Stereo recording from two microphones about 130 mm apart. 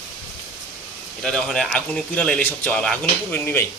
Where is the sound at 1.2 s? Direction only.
5° left (ahead or behind).